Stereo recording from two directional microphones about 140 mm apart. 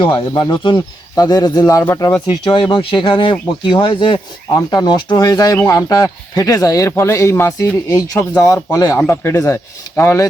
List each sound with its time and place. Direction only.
0.0 s speech: 35° left (ahead or behind); by 10.2 s 20° left (ahead or behind)